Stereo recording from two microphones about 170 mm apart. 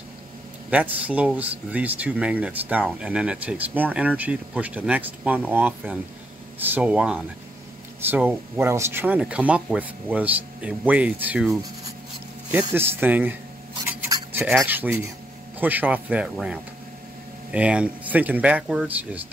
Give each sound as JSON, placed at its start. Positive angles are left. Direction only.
{"t": 0.7, "sound": "speech", "side_deg": -10}
{"t": 12.4, "sound": "speech", "side_deg": -10}
{"t": 14.0, "sound": "filing", "side_deg": -20}
{"t": 14.6, "sound": "speech", "side_deg": -15}